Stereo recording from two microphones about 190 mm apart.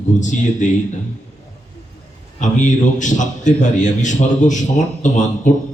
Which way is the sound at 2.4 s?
40° left (ahead or behind).